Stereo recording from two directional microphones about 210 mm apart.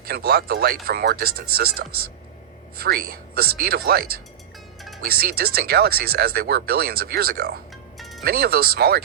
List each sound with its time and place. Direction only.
0.0 s speech: 50° right (ahead or behind)
7.9 s music: centre (ahead or behind)
8.2 s speech: 50° right (ahead or behind)